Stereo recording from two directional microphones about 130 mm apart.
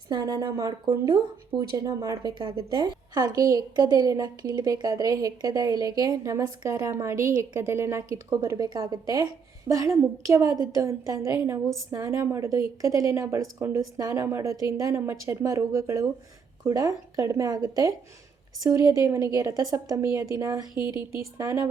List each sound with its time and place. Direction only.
0.1 s speech: 30° right (ahead or behind)
0.9 s speech: 40° right (ahead or behind)
1.7 s a woman's voice: 25° right (ahead or behind)